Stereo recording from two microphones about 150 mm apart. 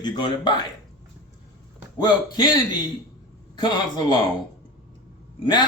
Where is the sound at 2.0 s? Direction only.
30° left (ahead or behind).